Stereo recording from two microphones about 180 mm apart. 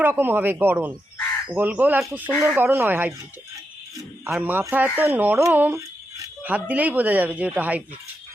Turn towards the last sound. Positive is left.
turn(degrees=-10)  # may be behind; listen again after turning